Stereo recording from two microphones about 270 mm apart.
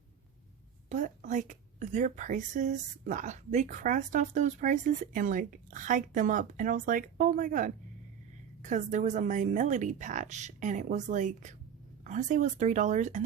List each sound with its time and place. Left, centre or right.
0.9 s a woman's voice: right